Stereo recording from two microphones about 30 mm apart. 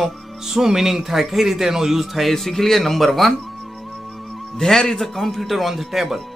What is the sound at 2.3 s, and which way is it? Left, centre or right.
Speech, centre.